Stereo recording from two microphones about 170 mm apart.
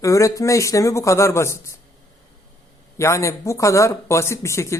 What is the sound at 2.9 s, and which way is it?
Speech, 15° left (ahead or behind).